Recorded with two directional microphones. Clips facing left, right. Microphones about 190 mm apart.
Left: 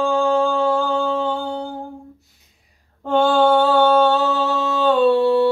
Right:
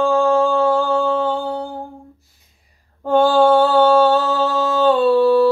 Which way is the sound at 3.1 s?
5° right (ahead or behind).